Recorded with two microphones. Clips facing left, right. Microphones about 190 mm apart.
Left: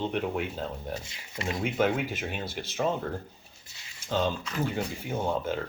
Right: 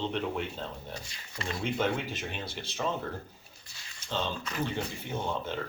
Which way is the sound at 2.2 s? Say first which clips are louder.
Left 3 dB; 50° left (ahead or behind).